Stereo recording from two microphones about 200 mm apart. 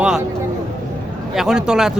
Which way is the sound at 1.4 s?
5° right (ahead or behind).